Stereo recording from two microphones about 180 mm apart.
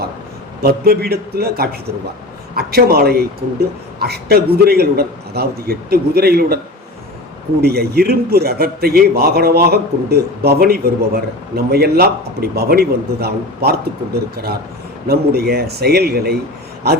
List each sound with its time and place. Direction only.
0.6 s a man's voice: 60° right (ahead or behind)
7.6 s a man's voice: 60° right (ahead or behind)